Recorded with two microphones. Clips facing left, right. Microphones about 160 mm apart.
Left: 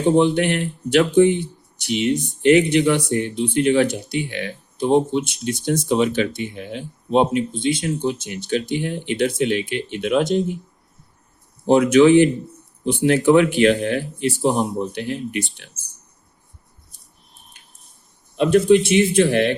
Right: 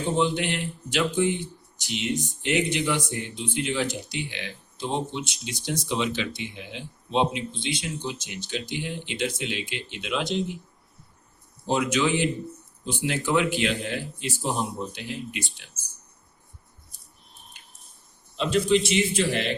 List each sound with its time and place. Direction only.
0.2 s speech: 60° left (ahead or behind)
11.6 s speech: 60° left (ahead or behind)
18.3 s speech: 55° left (ahead or behind)